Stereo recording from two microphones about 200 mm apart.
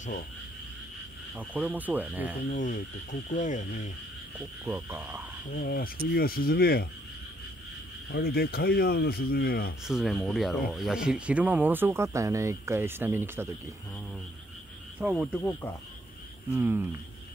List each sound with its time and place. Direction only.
1.5 s speech: 5° right (ahead or behind)
2.5 s speech: 40° left (ahead or behind)
4.6 s speech: 10° right (ahead or behind)
5.6 s speech: 50° left (ahead or behind)
8.1 s speech: 50° left (ahead or behind)
9.8 s speech: centre (ahead or behind)
15.0 s speech: 5° right (ahead or behind)
16.5 s speech: 10° right (ahead or behind)